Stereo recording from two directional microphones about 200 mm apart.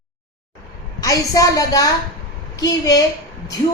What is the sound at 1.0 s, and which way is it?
A woman's voice, 15° left (ahead or behind).